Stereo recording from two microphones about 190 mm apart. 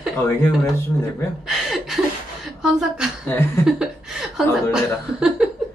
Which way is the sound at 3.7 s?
Centre (ahead or behind).